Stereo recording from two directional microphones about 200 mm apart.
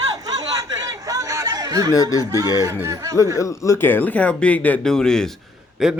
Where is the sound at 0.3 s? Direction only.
15° right (ahead or behind).